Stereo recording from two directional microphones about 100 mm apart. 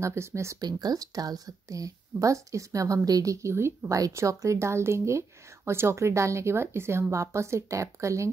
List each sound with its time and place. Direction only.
0.0 s a woman's voice: 30° right (ahead or behind)
0.6 s a woman's voice: 40° right (ahead or behind)